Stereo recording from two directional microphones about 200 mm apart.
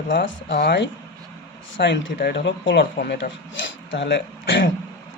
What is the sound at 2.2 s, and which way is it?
Speech, 55° left (ahead or behind).